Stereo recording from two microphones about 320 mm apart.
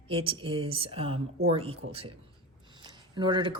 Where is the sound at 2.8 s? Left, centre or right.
Centre.